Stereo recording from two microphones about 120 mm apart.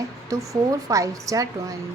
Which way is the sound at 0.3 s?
30° right (ahead or behind).